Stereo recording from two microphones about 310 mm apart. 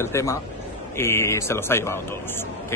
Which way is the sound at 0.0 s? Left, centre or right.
Centre.